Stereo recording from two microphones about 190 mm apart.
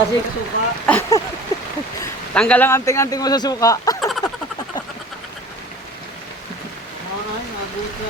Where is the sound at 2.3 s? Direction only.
5° left (ahead or behind).